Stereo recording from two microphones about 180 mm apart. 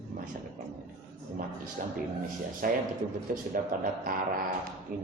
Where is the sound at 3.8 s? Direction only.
50° right (ahead or behind).